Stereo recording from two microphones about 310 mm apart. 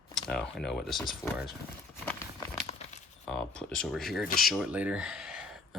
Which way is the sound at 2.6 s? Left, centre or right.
Centre.